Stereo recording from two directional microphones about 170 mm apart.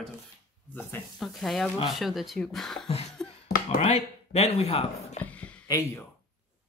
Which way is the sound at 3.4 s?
55° left (ahead or behind).